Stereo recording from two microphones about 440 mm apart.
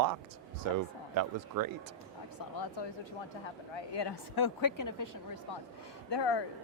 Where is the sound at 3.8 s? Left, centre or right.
Left.